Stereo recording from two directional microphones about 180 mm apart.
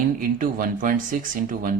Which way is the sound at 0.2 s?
50° right (ahead or behind).